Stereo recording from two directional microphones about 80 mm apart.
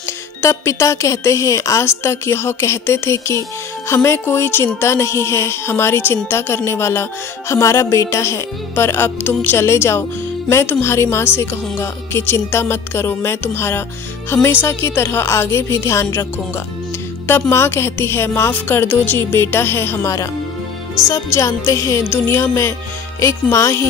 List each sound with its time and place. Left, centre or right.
0.4 s music: left